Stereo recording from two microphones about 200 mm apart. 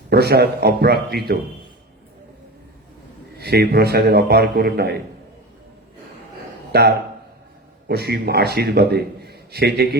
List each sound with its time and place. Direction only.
0.1 s a man's voice: 55° right (ahead or behind)
3.3 s a man's voice: 50° right (ahead or behind)
6.7 s a man's voice: 55° right (ahead or behind)